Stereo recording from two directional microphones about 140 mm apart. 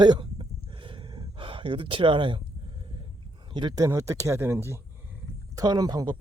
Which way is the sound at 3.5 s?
30° right (ahead or behind).